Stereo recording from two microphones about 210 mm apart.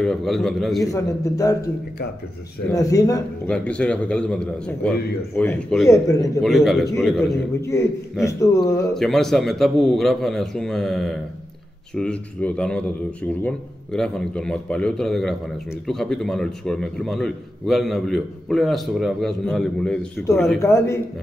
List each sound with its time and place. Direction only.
0.0 s a man's voice: centre (ahead or behind)
0.9 s a man's voice: 15° left (ahead or behind)
2.7 s a man's voice: 15° left (ahead or behind)
3.4 s a man's voice: 5° left (ahead or behind)
5.9 s a man's voice: 15° left (ahead or behind)
6.4 s a man's voice: centre (ahead or behind)
7.6 s a man's voice: 15° left (ahead or behind)
8.9 s a man's voice: centre (ahead or behind)